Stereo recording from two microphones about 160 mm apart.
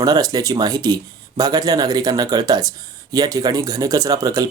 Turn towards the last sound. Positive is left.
turn(degrees=-20)  # may be behind; listen again after turning